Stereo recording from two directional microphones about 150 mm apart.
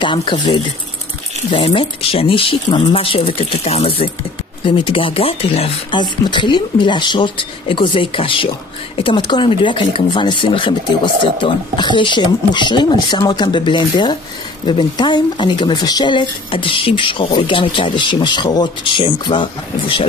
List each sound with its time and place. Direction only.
0.0 s speech: 35° left (ahead or behind)